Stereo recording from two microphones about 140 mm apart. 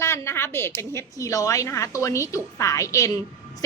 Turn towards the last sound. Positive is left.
turn(degrees=20)  # may be behind; listen again after turning